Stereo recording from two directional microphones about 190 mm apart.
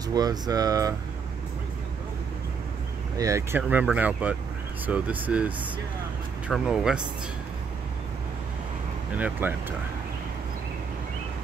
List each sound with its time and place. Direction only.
0.1 s speech: 20° right (ahead or behind)
3.2 s speech: 15° right (ahead or behind)
6.5 s speech: centre (ahead or behind)
9.1 s speech: 10° right (ahead or behind)